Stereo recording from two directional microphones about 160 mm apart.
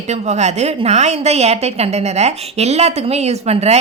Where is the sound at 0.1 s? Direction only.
45° right (ahead or behind).